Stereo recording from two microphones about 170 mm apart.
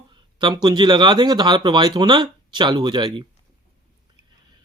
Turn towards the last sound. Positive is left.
turn(degrees=-25)  # may be behind; listen again after turning